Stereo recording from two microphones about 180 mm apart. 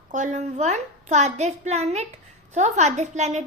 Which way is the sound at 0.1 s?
40° right (ahead or behind).